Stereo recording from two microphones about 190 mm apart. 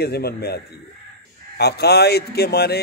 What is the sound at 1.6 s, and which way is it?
Speech, 60° left (ahead or behind).